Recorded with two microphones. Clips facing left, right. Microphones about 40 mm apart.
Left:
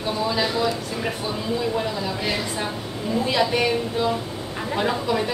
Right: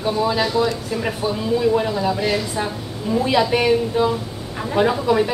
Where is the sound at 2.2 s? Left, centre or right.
Centre.